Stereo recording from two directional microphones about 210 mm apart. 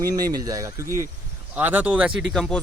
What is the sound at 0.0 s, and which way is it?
Speech, 15° right (ahead or behind).